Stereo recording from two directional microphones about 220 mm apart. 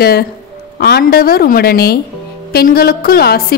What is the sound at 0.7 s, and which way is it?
A woman's voice, 45° left (ahead or behind).